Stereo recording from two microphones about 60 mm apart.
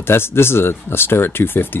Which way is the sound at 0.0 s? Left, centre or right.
Left.